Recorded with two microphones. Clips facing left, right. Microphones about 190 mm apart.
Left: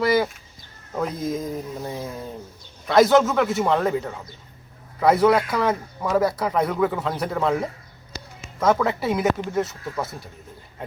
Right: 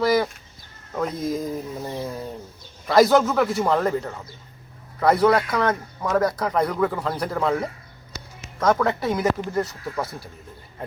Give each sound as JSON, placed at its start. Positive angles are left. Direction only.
{"t": 0.0, "sound": "a man's voice", "side_deg": 5}
{"t": 1.3, "sound": "a man's voice", "side_deg": 0}